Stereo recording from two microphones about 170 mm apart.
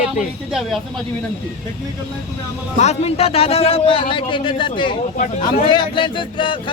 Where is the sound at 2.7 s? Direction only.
40° left (ahead or behind).